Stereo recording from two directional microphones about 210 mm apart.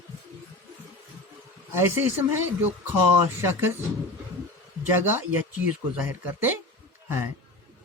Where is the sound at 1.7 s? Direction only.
10° right (ahead or behind).